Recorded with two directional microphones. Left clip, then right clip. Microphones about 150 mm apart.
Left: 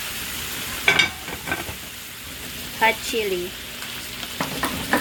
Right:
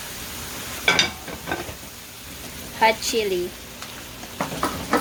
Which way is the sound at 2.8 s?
5° right (ahead or behind).